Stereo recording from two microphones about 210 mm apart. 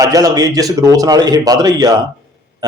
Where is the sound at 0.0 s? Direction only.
15° right (ahead or behind).